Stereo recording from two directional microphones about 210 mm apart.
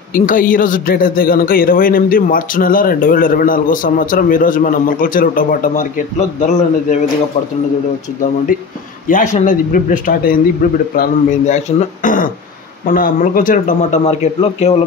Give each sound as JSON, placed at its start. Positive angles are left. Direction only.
{"t": 0.1, "sound": "a man's voice", "side_deg": 40}
{"t": 9.1, "sound": "a man's voice", "side_deg": 35}